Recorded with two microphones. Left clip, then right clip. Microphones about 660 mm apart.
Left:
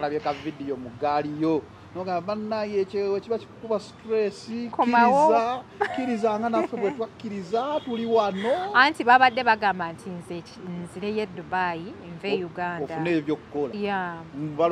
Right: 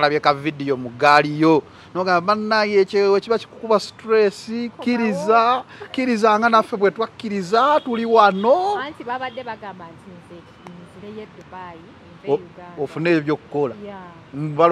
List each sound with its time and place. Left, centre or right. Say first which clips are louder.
0.0 s speech: right 10 dB; right
8.7 s speech: left 9 dB; left
11.1 s speech: left 10 dB; left
13.0 s speech: right 8 dB; right